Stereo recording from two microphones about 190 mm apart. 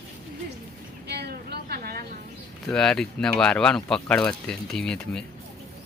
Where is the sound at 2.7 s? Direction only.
5° left (ahead or behind).